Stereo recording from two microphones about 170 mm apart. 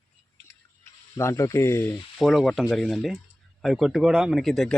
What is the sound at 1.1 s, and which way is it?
Speech, 20° left (ahead or behind).